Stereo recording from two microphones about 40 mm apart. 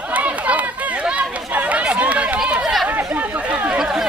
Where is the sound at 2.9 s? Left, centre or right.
Right.